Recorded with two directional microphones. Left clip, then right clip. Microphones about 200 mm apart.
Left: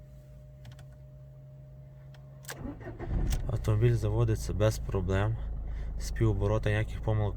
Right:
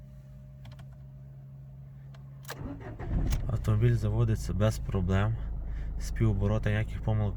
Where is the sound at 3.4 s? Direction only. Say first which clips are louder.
Left 3 dB; 10° left (ahead or behind).